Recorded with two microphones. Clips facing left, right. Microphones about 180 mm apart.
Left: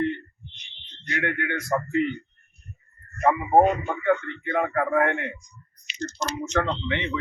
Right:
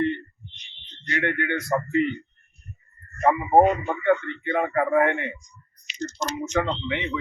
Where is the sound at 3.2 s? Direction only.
15° right (ahead or behind).